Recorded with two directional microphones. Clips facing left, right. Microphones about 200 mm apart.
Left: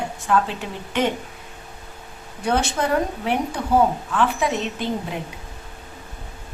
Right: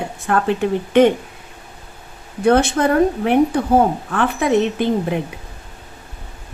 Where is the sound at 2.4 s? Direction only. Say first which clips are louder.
Right 8 dB; 55° right (ahead or behind).